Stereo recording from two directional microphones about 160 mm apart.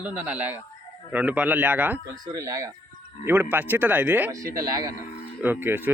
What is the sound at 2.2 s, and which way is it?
Speech, 20° right (ahead or behind).